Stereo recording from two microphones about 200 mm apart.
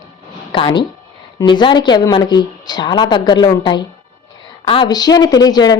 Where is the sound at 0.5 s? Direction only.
25° left (ahead or behind).